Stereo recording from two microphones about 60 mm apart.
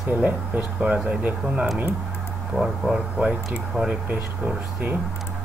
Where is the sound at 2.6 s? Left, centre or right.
Centre.